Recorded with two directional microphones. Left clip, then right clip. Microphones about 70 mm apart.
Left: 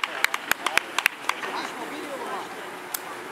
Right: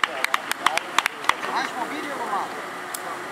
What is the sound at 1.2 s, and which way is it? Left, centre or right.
Run, right.